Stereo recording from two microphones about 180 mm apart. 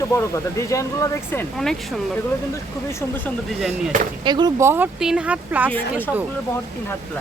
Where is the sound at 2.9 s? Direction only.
15° left (ahead or behind).